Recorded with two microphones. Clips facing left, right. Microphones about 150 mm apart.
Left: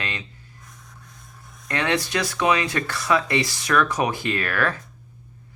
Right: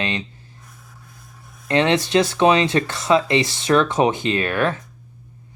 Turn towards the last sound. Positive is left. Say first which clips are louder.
# right 4 dB
turn(degrees=-20)  # may be behind; listen again after turning